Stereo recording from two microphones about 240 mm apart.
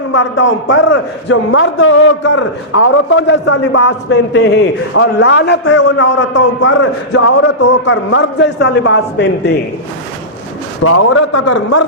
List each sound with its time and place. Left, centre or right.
0.1 s a man's voice: left
10.8 s a man's voice: left